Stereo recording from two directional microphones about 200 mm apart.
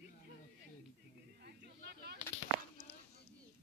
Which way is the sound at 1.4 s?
55° right (ahead or behind).